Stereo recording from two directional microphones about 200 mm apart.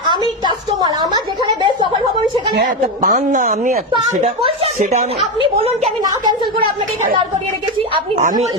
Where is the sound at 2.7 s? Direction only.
40° right (ahead or behind).